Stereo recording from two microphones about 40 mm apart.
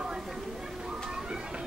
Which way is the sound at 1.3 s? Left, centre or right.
Right.